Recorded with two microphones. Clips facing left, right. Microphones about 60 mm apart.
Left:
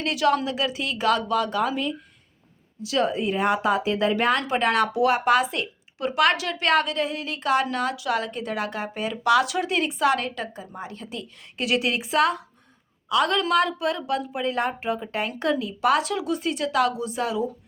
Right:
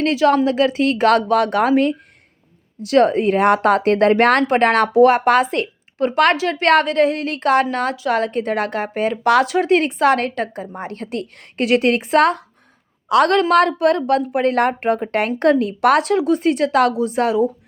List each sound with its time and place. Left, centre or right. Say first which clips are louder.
0.0 s a woman's voice: right 7 dB; right
13.1 s a woman's voice: right 8 dB; right